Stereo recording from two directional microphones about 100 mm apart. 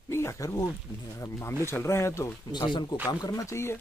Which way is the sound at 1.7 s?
25° left (ahead or behind).